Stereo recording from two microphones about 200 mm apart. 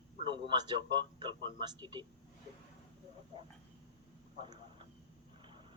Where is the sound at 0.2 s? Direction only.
25° right (ahead or behind).